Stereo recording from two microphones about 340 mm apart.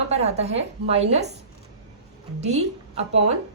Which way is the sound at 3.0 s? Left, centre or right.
Centre.